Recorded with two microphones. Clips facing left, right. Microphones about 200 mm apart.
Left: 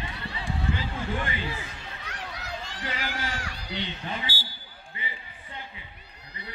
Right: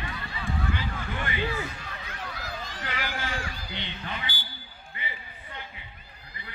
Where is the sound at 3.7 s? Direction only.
35° left (ahead or behind).